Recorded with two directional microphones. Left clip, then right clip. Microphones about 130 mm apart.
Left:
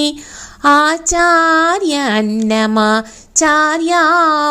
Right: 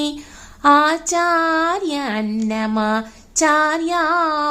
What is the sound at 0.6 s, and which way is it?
Speech, 40° left (ahead or behind).